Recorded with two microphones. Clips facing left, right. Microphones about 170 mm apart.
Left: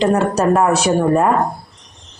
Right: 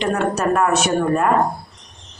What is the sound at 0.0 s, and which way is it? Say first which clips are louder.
Speech: left 5 dB; 35° left (ahead or behind).